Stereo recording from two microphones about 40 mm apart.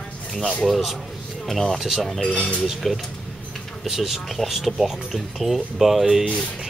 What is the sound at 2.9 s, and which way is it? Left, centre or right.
A man's voice, centre.